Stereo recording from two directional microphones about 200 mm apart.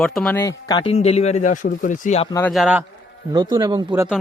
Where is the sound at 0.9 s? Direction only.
30° left (ahead or behind).